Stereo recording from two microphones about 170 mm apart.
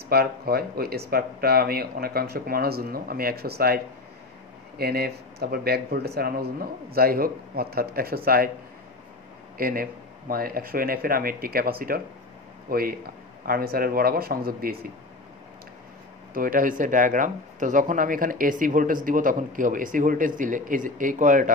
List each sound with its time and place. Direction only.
0.1 s speech: 65° right (ahead or behind)
9.6 s speech: 60° right (ahead or behind)
16.3 s speech: 55° right (ahead or behind)